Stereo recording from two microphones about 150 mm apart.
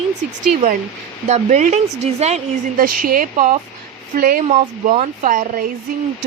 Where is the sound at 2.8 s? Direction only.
70° right (ahead or behind).